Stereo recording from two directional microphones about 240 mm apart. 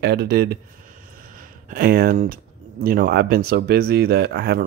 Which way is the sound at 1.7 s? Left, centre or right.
Right.